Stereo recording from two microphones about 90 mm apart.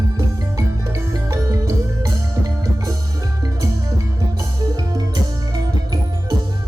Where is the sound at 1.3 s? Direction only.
40° right (ahead or behind).